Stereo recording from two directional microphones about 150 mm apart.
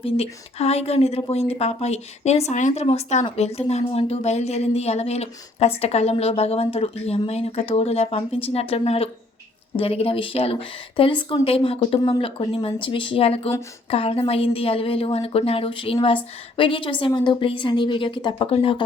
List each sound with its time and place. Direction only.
0.0 s a woman's voice: 40° left (ahead or behind)